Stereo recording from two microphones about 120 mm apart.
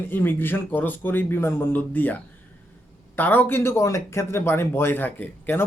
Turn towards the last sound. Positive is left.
turn(degrees=15)  # may be behind; listen again after turning